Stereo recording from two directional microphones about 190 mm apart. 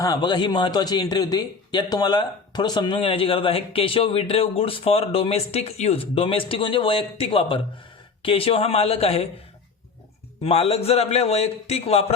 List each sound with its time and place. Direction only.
0.0 s a man's voice: 20° left (ahead or behind)
10.4 s a man's voice: 30° left (ahead or behind)